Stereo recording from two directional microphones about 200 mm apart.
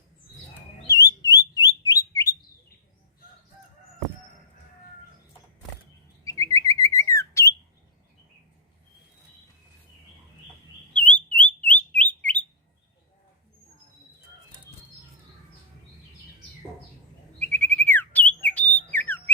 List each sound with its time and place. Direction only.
0.9 s alarm: 15° left (ahead or behind)
6.2 s bird: 15° left (ahead or behind)
11.3 s bird: 5° left (ahead or behind)
17.4 s bird: 10° left (ahead or behind)